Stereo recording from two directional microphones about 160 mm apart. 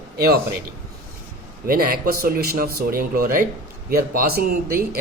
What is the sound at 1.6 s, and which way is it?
A man's voice, 65° right (ahead or behind).